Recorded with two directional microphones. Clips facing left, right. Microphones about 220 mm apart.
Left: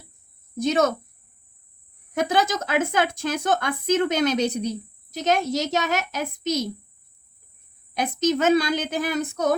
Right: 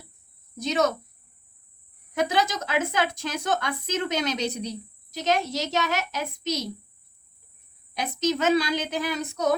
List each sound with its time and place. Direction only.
0.5 s speech: 50° left (ahead or behind)
2.1 s speech: 50° left (ahead or behind)
7.9 s speech: 50° left (ahead or behind)